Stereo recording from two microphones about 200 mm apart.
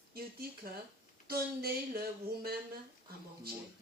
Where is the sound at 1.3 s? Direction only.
50° right (ahead or behind).